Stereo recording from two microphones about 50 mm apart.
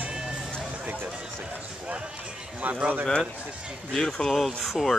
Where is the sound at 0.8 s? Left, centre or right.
Right.